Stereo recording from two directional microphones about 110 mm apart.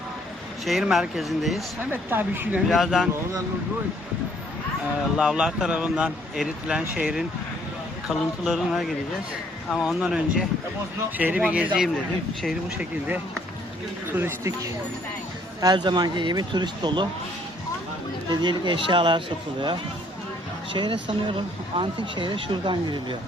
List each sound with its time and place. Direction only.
0.6 s speech: centre (ahead or behind)
1.9 s speech: 20° right (ahead or behind)
2.6 s speech: centre (ahead or behind)
5.1 s speech: 10° right (ahead or behind)
10.0 s speech: 10° right (ahead or behind)
14.2 s speech: 25° right (ahead or behind)
15.6 s speech: 40° right (ahead or behind)
18.3 s speech: 45° right (ahead or behind)
20.7 s speech: 45° right (ahead or behind)